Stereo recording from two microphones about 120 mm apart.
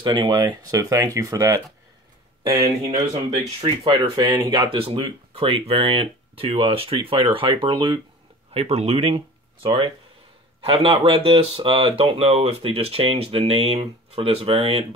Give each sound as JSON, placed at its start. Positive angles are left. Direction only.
{"t": 0.0, "sound": "speech", "side_deg": -40}
{"t": 3.6, "sound": "speech", "side_deg": -45}
{"t": 4.7, "sound": "speech", "side_deg": -50}
{"t": 8.5, "sound": "speech", "side_deg": -60}
{"t": 9.1, "sound": "speech", "side_deg": -40}